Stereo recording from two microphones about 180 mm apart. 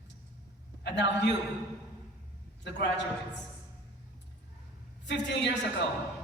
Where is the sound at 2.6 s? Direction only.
70° left (ahead or behind).